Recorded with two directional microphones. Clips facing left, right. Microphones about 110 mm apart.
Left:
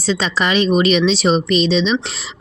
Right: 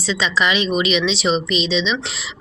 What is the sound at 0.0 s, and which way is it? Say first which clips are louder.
Speech: left 1 dB; 40° left (ahead or behind).